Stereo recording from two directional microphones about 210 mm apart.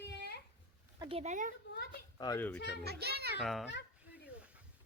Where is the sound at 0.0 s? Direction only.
55° left (ahead or behind).